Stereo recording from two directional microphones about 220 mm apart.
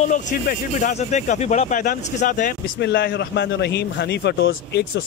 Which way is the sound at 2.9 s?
55° left (ahead or behind).